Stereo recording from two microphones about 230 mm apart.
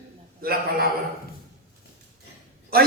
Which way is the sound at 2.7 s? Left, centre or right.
Right.